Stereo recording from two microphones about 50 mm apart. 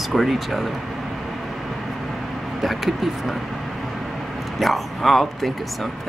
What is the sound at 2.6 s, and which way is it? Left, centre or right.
Speech, centre.